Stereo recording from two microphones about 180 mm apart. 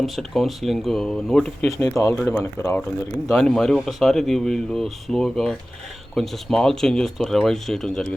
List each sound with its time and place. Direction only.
0.0 s speech: centre (ahead or behind)
2.0 s speech: 15° left (ahead or behind)